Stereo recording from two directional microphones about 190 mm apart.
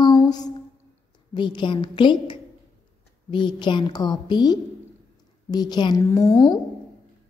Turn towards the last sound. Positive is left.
turn(degrees=20)  # may be behind; listen again after turning